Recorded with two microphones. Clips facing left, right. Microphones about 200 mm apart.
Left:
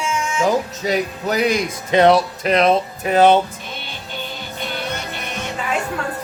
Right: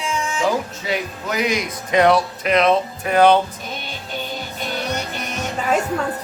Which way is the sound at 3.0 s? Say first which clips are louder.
Left 1 dB; 20° left (ahead or behind).